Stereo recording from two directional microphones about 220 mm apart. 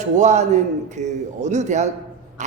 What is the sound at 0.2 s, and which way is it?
A woman's voice, 30° right (ahead or behind).